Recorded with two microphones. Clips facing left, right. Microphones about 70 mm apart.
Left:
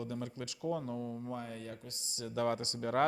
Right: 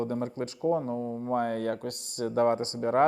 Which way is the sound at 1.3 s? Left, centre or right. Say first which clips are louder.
Right 14 dB; right.